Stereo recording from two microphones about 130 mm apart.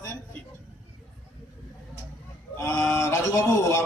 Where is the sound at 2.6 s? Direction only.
20° left (ahead or behind).